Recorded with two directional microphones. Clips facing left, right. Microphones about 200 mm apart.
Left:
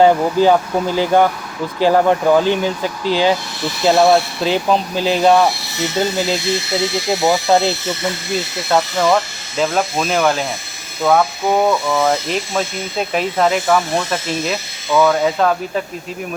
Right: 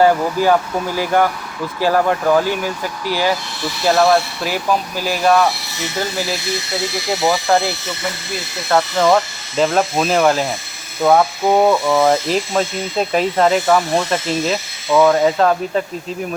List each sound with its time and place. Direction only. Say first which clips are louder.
0.0 s speech: left 2 dB; 20° left (ahead or behind)
9.0 s speech: right 1 dB; centre (ahead or behind)
12.3 s speech: right 2 dB; centre (ahead or behind)
14.8 s speech: right 2 dB; 10° right (ahead or behind)